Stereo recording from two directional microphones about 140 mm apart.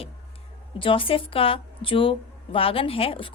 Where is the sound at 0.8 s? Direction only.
40° left (ahead or behind).